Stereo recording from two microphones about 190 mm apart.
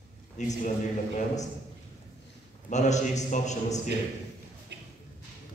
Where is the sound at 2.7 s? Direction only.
40° left (ahead or behind).